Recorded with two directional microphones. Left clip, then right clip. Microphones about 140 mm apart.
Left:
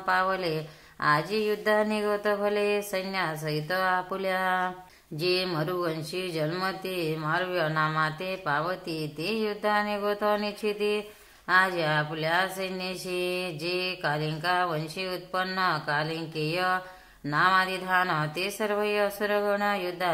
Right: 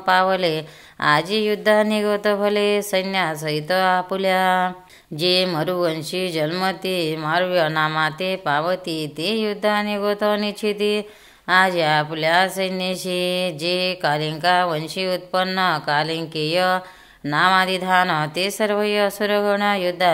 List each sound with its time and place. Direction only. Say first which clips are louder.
0.0 s speech: right 9 dB; 25° right (ahead or behind)